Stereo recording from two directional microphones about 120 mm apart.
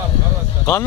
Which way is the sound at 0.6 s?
25° left (ahead or behind).